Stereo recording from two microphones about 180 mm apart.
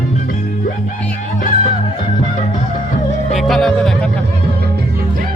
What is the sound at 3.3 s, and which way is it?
Music, centre (ahead or behind).